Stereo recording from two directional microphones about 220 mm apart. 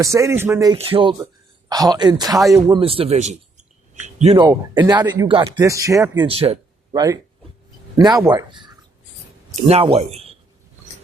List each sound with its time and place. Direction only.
0.0 s speech: 15° right (ahead or behind)
0.8 s speech: 25° right (ahead or behind)
4.4 s speech: 15° right (ahead or behind)